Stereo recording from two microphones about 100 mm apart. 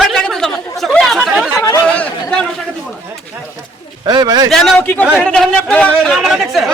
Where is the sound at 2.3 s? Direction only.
10° left (ahead or behind).